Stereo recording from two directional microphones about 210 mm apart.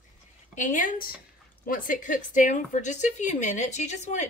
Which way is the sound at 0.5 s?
35° left (ahead or behind).